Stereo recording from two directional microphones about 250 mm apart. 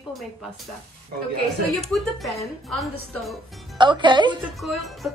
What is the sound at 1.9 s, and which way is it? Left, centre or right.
A woman's voice, centre.